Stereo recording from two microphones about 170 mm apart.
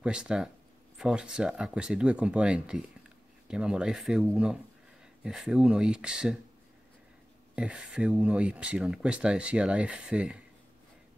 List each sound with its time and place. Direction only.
0.0 s speech: 5° right (ahead or behind)
7.5 s speech: 5° right (ahead or behind)